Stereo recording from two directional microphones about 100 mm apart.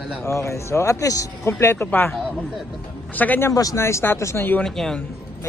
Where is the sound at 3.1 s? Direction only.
15° left (ahead or behind).